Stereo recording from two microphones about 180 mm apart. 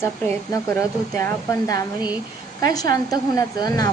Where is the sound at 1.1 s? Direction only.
15° left (ahead or behind).